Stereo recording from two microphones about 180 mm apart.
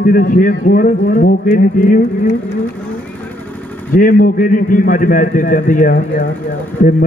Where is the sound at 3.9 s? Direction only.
50° left (ahead or behind).